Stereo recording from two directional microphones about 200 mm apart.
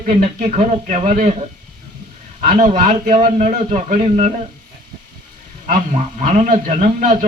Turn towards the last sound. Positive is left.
turn(degrees=-40)  # may be behind; listen again after turning